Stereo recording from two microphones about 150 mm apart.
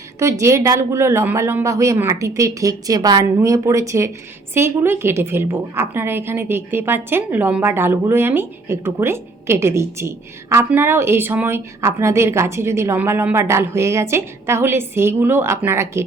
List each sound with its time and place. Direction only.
0.2 s a woman's voice: 20° right (ahead or behind)